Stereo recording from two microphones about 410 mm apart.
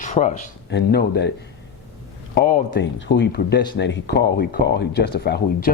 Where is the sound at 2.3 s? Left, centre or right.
Centre.